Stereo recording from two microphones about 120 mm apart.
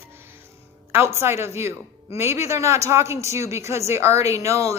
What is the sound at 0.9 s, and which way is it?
A man's voice, 20° right (ahead or behind).